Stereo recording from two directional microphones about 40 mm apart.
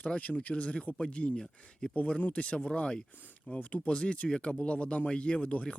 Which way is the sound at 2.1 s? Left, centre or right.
Left.